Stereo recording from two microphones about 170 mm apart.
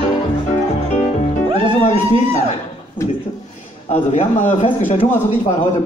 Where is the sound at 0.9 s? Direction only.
40° left (ahead or behind).